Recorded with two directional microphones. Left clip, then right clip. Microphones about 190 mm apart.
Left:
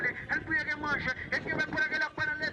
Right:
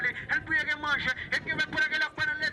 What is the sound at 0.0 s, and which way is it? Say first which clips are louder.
Vehicle: right 3 dB; 20° right (ahead or behind).